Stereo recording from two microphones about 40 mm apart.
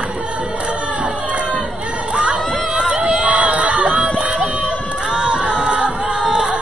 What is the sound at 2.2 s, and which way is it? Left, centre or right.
Crowd, right.